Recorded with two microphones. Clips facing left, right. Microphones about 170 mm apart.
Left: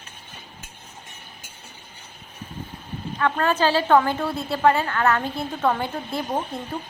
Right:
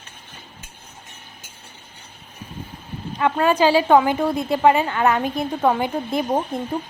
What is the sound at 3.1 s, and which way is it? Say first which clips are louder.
A woman's voice: right 4 dB; 15° right (ahead or behind).